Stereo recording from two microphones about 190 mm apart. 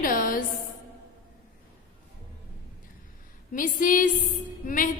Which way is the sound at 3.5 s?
45° left (ahead or behind).